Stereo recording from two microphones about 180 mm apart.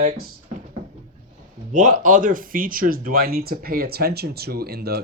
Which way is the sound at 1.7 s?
45° right (ahead or behind).